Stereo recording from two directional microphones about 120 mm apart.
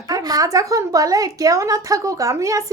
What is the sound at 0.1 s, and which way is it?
A woman's voice, 30° right (ahead or behind).